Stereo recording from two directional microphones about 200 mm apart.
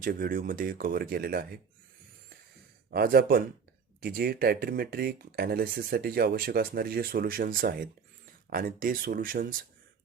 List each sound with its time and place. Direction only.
0.0 s speech: 45° right (ahead or behind)
2.9 s speech: 50° right (ahead or behind)